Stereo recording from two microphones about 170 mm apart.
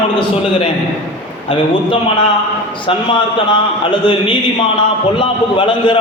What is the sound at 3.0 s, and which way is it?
A man's voice, 25° left (ahead or behind).